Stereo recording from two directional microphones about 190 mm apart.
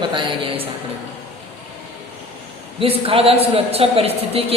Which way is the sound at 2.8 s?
30° right (ahead or behind).